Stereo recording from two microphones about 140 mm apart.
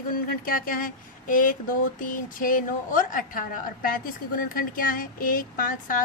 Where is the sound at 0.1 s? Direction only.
90° left.